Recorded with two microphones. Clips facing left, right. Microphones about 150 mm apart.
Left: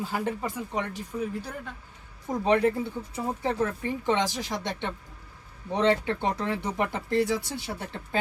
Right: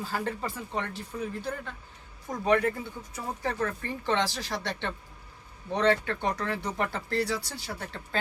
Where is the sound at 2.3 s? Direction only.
25° left (ahead or behind).